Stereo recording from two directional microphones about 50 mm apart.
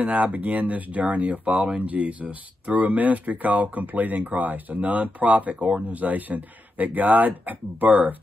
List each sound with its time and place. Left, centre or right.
0.0 s speech: right